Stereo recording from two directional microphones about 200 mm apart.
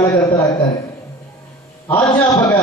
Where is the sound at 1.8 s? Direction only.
15° left (ahead or behind).